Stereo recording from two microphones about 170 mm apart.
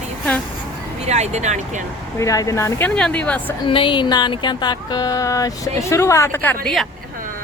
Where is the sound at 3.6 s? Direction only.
30° left (ahead or behind); by 6.9 s 5° left (ahead or behind).